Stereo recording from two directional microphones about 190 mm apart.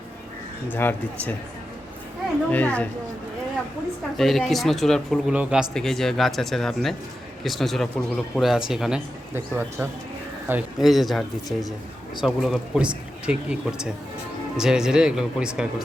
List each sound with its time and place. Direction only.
0.7 s speech: 10° left (ahead or behind)
2.5 s speech: 10° left (ahead or behind)
4.2 s speech: centre (ahead or behind)